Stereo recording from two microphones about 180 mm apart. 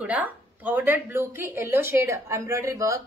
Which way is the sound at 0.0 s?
10° right (ahead or behind).